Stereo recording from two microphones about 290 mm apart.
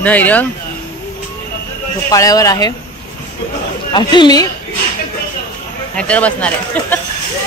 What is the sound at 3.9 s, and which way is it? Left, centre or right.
Speech, centre.